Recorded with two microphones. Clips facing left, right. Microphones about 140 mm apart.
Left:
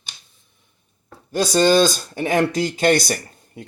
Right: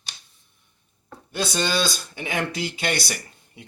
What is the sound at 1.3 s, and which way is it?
Speech, 40° left (ahead or behind).